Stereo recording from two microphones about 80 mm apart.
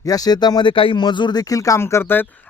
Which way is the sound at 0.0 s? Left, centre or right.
Left.